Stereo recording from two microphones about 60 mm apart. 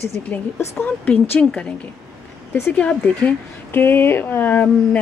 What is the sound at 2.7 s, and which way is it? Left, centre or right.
Speech, left.